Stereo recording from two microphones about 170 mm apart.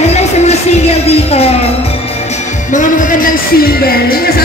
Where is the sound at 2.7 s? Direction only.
55° left (ahead or behind).